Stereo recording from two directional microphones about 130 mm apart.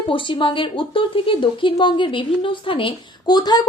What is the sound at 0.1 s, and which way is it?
A woman's voice, 40° left (ahead or behind).